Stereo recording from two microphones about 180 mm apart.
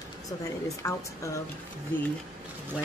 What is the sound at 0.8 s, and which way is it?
Speech, 20° left (ahead or behind).